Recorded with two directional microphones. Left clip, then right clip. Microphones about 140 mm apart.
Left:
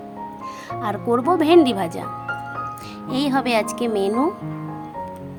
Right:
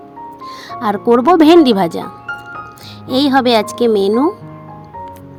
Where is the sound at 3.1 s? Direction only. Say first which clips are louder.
Right 9 dB; 40° right (ahead or behind).